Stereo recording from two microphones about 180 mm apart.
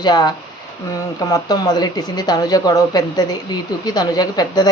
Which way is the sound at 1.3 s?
20° left (ahead or behind).